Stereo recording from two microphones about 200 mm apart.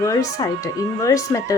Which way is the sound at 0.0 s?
15° left (ahead or behind).